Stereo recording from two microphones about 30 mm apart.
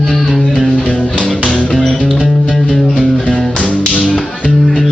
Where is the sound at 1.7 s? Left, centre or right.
Centre.